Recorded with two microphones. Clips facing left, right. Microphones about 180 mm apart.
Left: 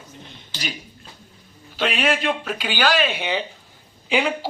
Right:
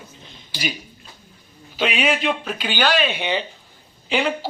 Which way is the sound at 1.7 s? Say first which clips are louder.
Right 1 dB; centre (ahead or behind).